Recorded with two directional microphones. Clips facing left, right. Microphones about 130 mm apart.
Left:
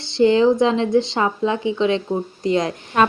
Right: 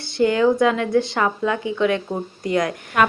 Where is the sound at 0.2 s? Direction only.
25° left (ahead or behind).